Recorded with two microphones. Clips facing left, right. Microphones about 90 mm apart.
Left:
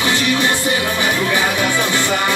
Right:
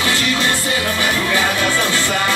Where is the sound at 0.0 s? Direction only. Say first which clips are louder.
Left 2 dB; 20° left (ahead or behind).